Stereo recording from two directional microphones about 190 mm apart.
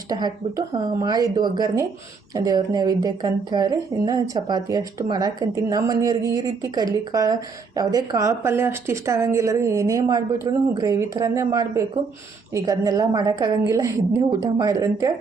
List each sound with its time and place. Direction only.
0.1 s speech: 20° right (ahead or behind)